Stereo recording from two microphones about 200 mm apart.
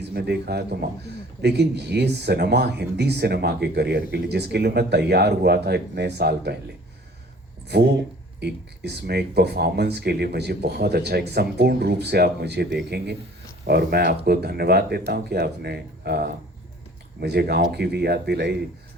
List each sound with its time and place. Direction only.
0.1 s speech: 50° right (ahead or behind)
7.7 s speech: 55° right (ahead or behind)